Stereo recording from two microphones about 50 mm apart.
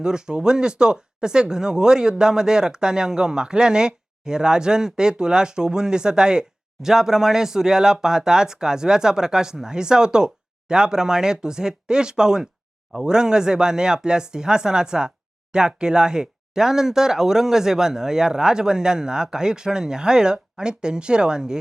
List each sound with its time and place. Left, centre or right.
0.0 s speech: centre